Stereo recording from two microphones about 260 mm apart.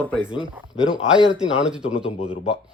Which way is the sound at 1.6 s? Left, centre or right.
Centre.